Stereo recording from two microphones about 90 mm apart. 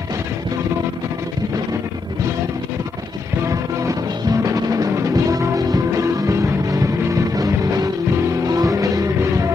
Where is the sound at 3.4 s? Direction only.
35° right (ahead or behind).